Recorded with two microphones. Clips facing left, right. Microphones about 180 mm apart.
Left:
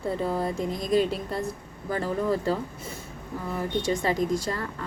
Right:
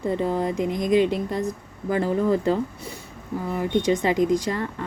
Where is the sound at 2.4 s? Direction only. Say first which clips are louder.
Right 5 dB; 20° right (ahead or behind).